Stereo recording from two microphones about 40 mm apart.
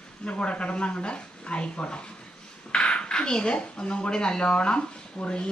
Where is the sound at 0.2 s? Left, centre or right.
Left.